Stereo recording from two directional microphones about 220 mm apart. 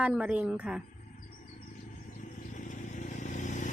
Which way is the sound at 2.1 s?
35° left (ahead or behind).